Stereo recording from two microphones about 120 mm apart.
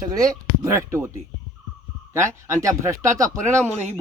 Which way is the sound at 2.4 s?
25° right (ahead or behind).